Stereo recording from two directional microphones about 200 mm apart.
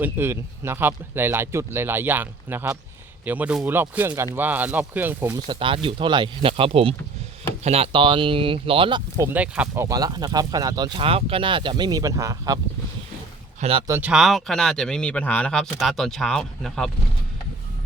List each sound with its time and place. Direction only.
0.0 s speech: 10° right (ahead or behind)
5.5 s speech: 25° right (ahead or behind)
13.6 s speech: 30° right (ahead or behind)
13.8 s speech: 10° right (ahead or behind)